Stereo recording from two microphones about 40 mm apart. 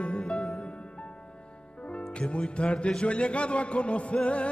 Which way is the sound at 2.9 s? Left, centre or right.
Left.